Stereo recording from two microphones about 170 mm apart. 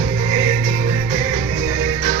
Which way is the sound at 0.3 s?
45° right (ahead or behind).